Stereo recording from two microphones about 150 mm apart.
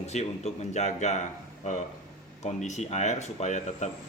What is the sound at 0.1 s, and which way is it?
Speech, 50° left (ahead or behind).